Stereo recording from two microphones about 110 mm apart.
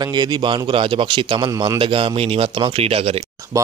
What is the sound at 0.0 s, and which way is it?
A man's voice, 40° right (ahead or behind).